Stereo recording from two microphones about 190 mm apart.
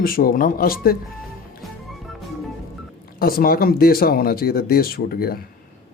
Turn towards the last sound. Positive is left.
turn(degrees=55)  # may be behind; listen again after turning